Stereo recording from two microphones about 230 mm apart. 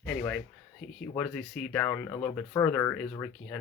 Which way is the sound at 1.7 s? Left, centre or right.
Centre.